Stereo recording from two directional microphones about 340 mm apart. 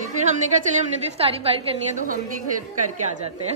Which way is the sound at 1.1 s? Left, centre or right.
Centre.